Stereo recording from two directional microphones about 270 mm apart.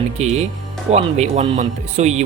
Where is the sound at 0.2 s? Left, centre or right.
Right.